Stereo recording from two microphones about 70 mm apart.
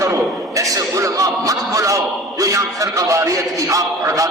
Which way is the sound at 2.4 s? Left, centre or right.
Right.